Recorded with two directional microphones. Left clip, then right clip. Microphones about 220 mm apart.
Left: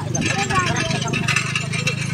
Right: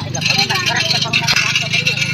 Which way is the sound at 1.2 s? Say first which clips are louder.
Right 7 dB; 35° right (ahead or behind).